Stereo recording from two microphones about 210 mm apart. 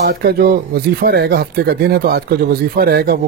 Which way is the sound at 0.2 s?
50° right (ahead or behind).